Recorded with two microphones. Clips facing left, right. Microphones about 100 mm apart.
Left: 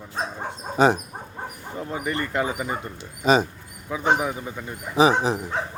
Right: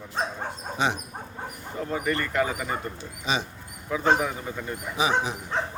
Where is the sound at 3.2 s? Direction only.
45° left (ahead or behind).